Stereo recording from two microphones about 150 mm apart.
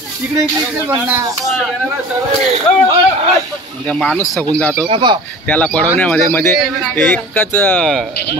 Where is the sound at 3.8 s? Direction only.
5° left (ahead or behind).